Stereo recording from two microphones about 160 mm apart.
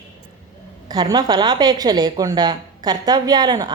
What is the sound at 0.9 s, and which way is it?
Speech, 25° right (ahead or behind).